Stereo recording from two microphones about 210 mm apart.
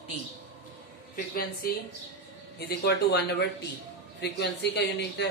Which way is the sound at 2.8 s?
50° left (ahead or behind).